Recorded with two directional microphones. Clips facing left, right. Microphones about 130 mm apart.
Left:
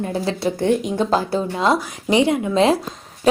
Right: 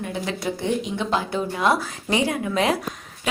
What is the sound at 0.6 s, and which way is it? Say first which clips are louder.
Speech: left 7 dB; 50° left (ahead or behind).